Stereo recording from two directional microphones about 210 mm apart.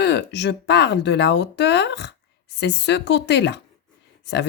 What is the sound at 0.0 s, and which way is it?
Speech, 55° left (ahead or behind).